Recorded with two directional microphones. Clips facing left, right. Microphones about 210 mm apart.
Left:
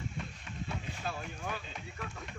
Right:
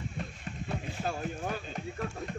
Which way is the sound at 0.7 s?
45° right (ahead or behind).